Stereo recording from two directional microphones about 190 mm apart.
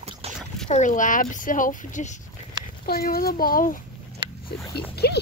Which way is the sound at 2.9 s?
50° left (ahead or behind).